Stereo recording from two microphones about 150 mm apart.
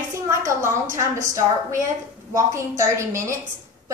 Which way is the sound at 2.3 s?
20° right (ahead or behind).